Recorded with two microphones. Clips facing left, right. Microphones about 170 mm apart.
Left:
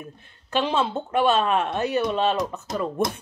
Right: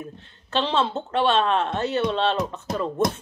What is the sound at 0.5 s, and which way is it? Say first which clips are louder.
Speech: even; 10° left (ahead or behind).